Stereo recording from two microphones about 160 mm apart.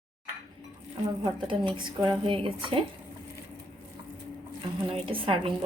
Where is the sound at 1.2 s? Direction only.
30° right (ahead or behind).